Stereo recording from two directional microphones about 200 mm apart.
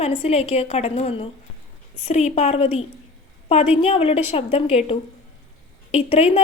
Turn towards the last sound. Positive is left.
turn(degrees=30)  # may be behind; listen again after turning